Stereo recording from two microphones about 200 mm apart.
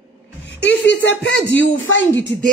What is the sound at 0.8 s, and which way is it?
Speech, 70° left (ahead or behind).